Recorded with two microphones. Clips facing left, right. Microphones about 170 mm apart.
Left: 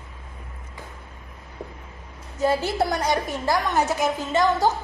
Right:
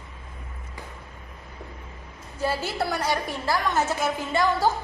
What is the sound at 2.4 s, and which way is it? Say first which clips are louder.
A woman's voice: left 5 dB; 20° left (ahead or behind).